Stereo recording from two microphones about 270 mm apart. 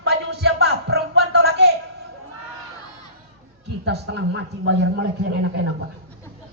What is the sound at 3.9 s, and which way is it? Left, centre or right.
A man's voice, right.